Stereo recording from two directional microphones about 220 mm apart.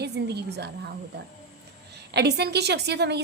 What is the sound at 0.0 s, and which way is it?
Speech, 50° right (ahead or behind).